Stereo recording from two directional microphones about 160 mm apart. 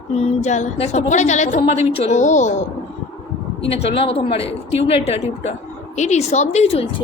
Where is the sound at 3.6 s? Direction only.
40° left (ahead or behind).